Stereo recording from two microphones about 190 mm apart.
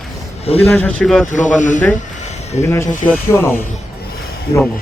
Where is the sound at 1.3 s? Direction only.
40° left (ahead or behind).